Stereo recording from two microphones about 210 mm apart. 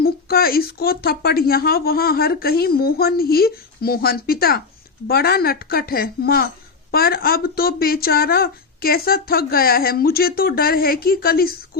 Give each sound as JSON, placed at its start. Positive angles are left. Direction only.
{"t": 0.0, "sound": "speech", "side_deg": 45}